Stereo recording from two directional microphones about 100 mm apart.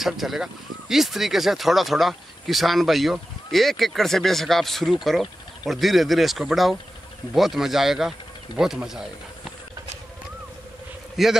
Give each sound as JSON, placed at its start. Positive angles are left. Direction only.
{"t": 0.0, "sound": "speech", "side_deg": 0}
{"t": 11.2, "sound": "speech", "side_deg": 0}